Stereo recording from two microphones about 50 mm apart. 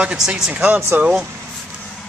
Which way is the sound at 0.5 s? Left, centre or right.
Right.